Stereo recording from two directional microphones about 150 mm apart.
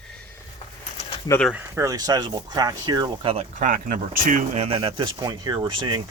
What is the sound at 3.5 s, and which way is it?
Speech, 65° right (ahead or behind).